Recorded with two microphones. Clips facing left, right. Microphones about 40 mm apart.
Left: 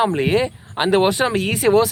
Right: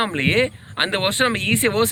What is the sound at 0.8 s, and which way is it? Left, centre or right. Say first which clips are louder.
Speech: left 4 dB; right.